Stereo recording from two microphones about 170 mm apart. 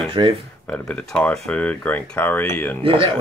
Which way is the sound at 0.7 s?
5° left (ahead or behind).